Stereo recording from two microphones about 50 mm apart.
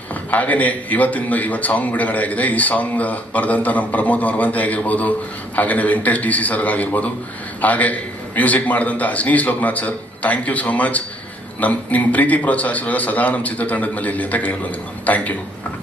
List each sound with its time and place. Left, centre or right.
0.3 s a man's voice: left